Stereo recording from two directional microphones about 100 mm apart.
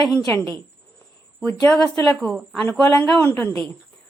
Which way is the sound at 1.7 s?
10° left (ahead or behind).